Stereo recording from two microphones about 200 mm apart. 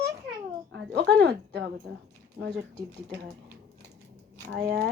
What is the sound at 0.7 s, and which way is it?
Speech, 55° right (ahead or behind).